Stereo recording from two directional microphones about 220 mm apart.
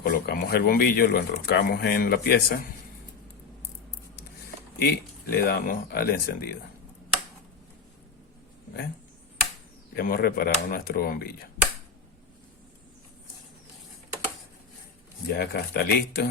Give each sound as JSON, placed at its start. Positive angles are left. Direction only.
{"t": 0.0, "sound": "speech", "side_deg": 40}
{"t": 4.8, "sound": "speech", "side_deg": 45}
{"t": 9.9, "sound": "speech", "side_deg": 40}
{"t": 15.3, "sound": "speech", "side_deg": 50}